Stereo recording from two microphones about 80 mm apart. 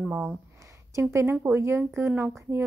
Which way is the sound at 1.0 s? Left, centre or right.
Right.